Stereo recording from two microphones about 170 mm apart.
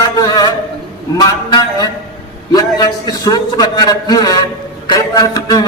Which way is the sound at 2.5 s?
20° left (ahead or behind).